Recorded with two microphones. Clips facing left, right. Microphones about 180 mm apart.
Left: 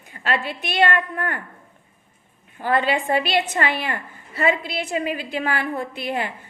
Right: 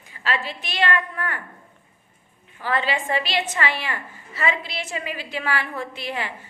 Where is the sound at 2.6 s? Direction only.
50° left (ahead or behind).